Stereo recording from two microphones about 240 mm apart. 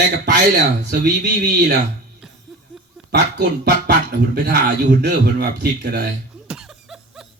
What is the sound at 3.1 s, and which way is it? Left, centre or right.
A man's voice, right.